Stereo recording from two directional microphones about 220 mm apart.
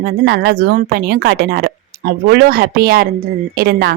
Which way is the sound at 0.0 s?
50° right (ahead or behind).